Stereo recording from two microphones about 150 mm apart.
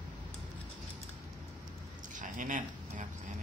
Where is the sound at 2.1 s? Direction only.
60° right (ahead or behind).